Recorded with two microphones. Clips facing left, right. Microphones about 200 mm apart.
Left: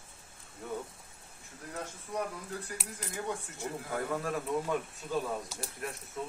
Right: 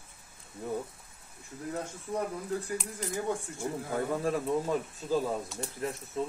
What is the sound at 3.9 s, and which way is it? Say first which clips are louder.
Speech: right 4 dB; 30° right (ahead or behind).